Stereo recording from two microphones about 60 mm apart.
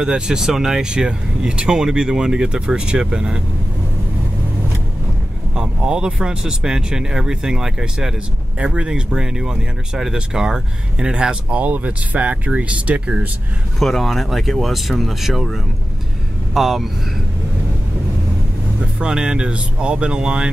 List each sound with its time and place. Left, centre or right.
0.0 s speech: centre
5.5 s speech: centre
13.7 s speech: centre
18.8 s speech: centre